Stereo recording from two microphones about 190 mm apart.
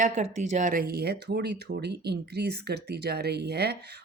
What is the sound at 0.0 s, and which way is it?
Speech, 40° right (ahead or behind).